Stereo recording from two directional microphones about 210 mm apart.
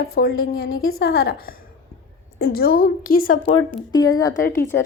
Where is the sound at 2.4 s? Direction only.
45° left (ahead or behind).